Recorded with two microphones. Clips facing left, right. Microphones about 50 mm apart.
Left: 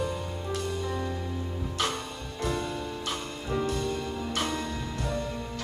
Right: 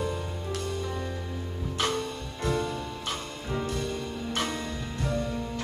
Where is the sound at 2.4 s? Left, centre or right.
Right.